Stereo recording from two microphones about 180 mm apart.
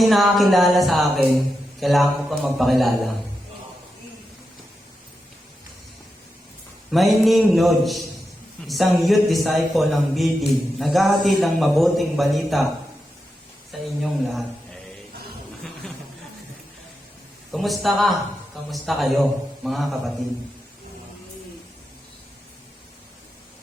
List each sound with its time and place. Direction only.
0.0 s a man's voice: centre (ahead or behind)
6.9 s a man's voice: centre (ahead or behind)
13.7 s speech: centre (ahead or behind)
15.8 s a sound: 5° left (ahead or behind)
17.5 s a man's voice: centre (ahead or behind)